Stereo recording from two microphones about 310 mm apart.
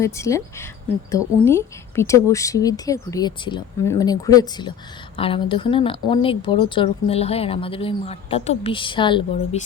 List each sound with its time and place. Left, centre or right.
0.0 s speech: centre